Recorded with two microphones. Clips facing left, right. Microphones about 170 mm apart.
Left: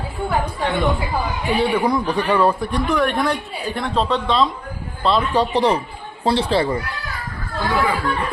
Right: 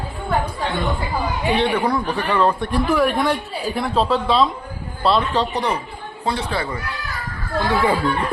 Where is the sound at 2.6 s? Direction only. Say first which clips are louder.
Right 1 dB; 5° right (ahead or behind).